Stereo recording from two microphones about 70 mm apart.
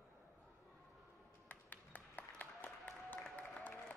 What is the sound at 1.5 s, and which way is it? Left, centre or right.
Applause, left.